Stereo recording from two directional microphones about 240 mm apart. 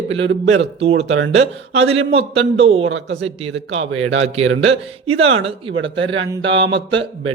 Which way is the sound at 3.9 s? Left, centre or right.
Right.